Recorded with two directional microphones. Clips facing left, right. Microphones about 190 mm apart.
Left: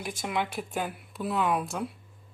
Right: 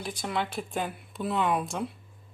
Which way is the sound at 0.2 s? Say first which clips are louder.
Even; 15° left (ahead or behind).